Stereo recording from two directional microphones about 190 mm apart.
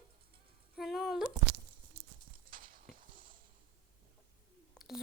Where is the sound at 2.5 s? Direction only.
45° right (ahead or behind).